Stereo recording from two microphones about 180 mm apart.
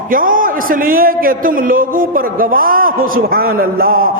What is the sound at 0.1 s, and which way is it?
A man's voice, 50° right (ahead or behind).